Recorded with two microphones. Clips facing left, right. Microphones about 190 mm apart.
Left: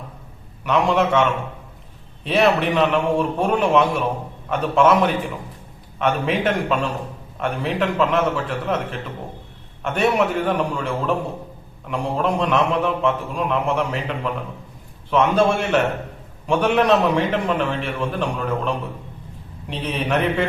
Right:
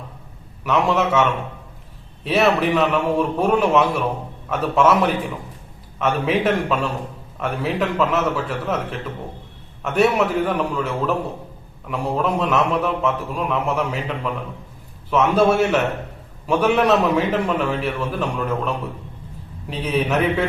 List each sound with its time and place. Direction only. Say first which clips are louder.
0.6 s a man's voice: left 1 dB; centre (ahead or behind)
15.1 s a man's voice: right 1 dB; 5° right (ahead or behind)
19.7 s a man's voice: right 2 dB; 5° right (ahead or behind)